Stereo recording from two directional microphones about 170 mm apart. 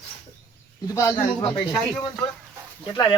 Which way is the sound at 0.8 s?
20° left (ahead or behind).